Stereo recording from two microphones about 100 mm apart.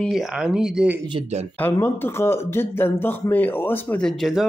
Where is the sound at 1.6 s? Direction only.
25° left (ahead or behind).